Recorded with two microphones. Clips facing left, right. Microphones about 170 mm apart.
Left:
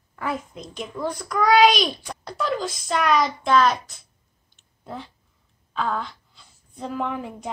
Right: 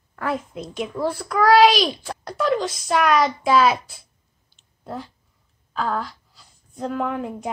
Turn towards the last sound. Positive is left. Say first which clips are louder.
# right 3 dB
turn(degrees=0)  # may be behind; listen again after turning